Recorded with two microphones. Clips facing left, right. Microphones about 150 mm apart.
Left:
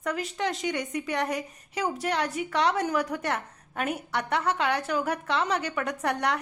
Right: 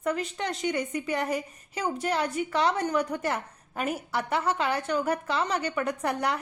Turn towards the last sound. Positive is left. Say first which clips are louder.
# even
turn(degrees=0)  # may be behind; listen again after turning